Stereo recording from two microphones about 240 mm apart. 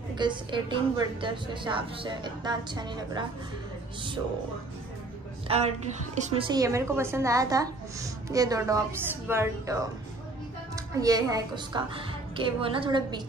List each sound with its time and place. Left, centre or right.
0.2 s a woman's voice: centre
5.5 s a woman's voice: right
11.0 s a woman's voice: centre